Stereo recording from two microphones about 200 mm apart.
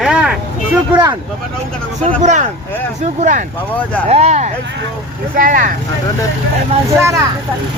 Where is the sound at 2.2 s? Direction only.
35° right (ahead or behind).